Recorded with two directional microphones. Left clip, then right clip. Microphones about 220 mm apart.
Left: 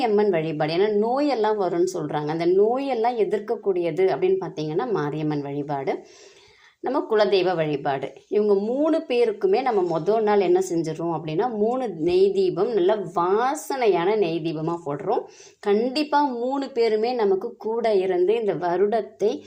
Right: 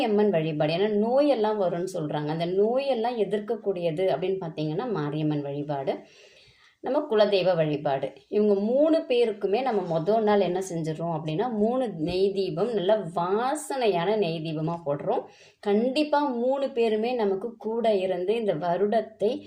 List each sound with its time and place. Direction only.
0.0 s speech: 25° left (ahead or behind)